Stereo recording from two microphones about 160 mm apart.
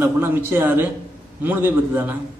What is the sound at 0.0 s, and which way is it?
A man's voice, 15° right (ahead or behind).